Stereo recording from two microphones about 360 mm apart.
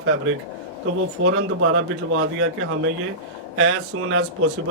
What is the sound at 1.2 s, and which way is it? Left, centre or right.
Speech, right.